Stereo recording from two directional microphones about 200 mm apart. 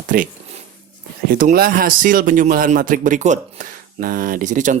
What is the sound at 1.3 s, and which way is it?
A man's voice, 45° right (ahead or behind).